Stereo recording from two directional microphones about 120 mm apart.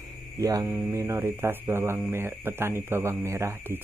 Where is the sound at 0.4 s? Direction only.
30° right (ahead or behind).